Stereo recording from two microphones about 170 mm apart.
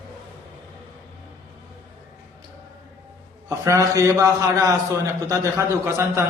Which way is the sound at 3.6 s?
20° right (ahead or behind).